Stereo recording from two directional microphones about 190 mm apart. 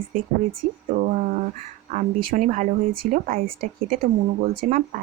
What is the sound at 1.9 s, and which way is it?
Speech, 45° right (ahead or behind).